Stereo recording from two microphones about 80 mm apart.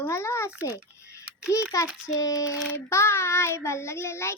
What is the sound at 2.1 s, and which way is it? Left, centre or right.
Speech, left.